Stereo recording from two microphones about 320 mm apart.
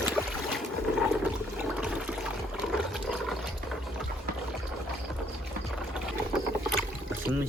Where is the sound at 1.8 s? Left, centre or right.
Centre.